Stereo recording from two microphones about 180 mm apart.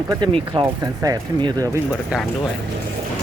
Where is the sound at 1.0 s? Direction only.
20° right (ahead or behind).